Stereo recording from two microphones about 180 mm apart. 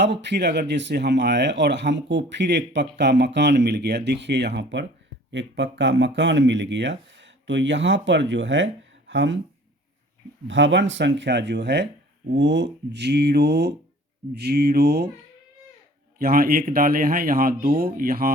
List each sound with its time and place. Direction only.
0.0 s speech: 75° right (ahead or behind); by 9.4 s 90° right
10.4 s speech: 90° right; by 15.1 s 60° right (ahead or behind)
16.1 s speech: 55° right (ahead or behind)